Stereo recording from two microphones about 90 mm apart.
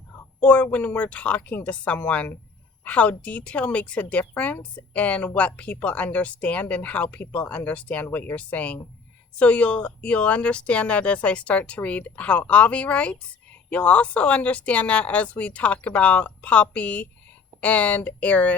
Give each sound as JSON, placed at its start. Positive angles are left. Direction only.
{"t": 0.3, "sound": "speech", "side_deg": 15}